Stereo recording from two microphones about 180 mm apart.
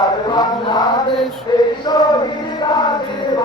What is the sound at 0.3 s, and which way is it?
Chant, 25° left (ahead or behind).